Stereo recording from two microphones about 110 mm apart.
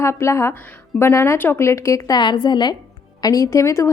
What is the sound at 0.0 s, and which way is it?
A woman's voice, 25° left (ahead or behind).